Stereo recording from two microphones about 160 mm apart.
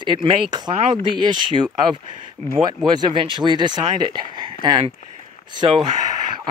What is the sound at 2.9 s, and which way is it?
Speech, 30° right (ahead or behind).